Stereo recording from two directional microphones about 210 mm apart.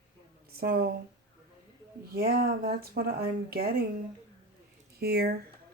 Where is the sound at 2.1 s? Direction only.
45° right (ahead or behind).